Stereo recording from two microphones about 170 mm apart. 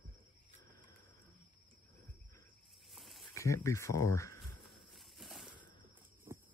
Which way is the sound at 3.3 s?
15° left (ahead or behind).